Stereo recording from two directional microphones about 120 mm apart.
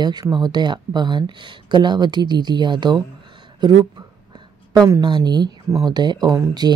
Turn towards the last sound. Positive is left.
turn(degrees=-30)  # may be behind; listen again after turning